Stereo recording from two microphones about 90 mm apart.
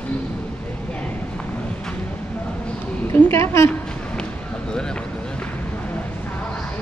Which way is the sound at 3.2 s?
30° left (ahead or behind).